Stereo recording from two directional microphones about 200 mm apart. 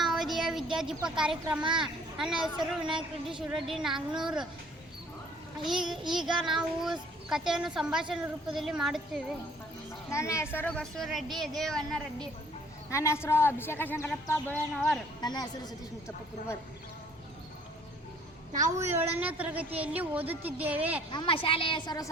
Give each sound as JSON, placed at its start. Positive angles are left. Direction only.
{"t": 0.0, "sound": "a sound", "side_deg": 0}
{"t": 1.2, "sound": "a woman's voice", "side_deg": -5}
{"t": 5.6, "sound": "a woman's voice", "side_deg": 0}
{"t": 10.1, "sound": "a woman's voice", "side_deg": 15}
{"t": 12.9, "sound": "a man's voice", "side_deg": 15}
{"t": 15.2, "sound": "a woman's voice", "side_deg": 20}
{"t": 18.8, "sound": "a woman's voice", "side_deg": -10}
{"t": 21.1, "sound": "a woman's voice", "side_deg": 25}